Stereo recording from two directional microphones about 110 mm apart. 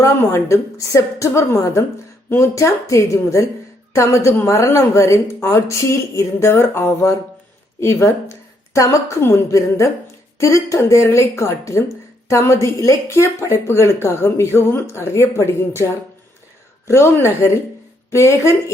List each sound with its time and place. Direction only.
0.0 s a woman's voice: 25° left (ahead or behind)
16.9 s a woman's voice: 25° left (ahead or behind)